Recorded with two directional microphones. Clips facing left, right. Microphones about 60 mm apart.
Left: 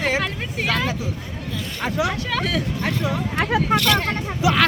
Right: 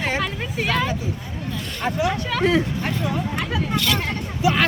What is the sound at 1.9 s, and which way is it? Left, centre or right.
Speech, left.